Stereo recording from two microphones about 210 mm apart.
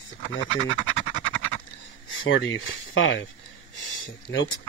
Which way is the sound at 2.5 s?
65° left (ahead or behind).